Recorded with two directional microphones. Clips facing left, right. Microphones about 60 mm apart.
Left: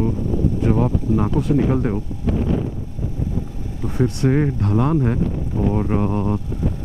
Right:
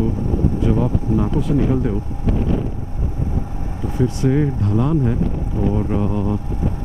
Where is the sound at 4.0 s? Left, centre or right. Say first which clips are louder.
Even; left.